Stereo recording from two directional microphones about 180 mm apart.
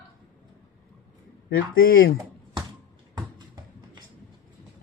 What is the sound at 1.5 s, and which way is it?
Speech, 75° left (ahead or behind).